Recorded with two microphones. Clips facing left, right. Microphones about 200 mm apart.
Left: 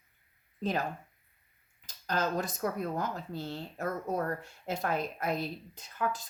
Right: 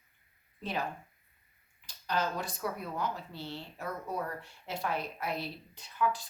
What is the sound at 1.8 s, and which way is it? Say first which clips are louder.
Speech: left 1 dB; 45° left (ahead or behind).